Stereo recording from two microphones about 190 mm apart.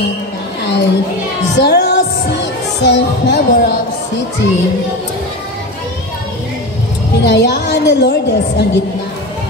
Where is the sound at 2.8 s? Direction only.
60° left (ahead or behind).